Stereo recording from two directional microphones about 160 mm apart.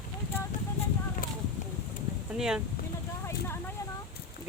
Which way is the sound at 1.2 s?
60° left (ahead or behind).